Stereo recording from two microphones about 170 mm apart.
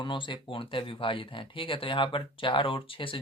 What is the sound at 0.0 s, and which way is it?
Speech, 30° left (ahead or behind).